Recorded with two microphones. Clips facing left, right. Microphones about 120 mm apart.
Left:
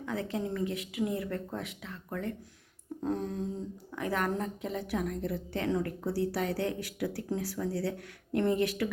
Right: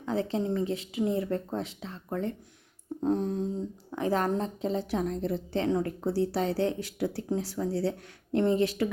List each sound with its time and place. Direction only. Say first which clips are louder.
0.0 s a woman's voice: right 5 dB; 30° right (ahead or behind)